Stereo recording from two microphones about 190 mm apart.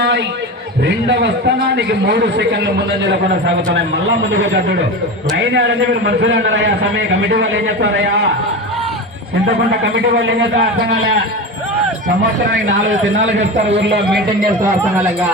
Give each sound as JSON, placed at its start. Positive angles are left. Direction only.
{"t": 0.9, "sound": "a man's voice", "side_deg": -70}
{"t": 5.4, "sound": "a man's voice", "side_deg": -65}
{"t": 9.8, "sound": "a man's voice", "side_deg": -70}
{"t": 14.6, "sound": "speech", "side_deg": -10}